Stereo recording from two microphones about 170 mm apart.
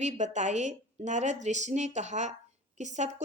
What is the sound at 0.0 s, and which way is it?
A woman's voice, 45° right (ahead or behind).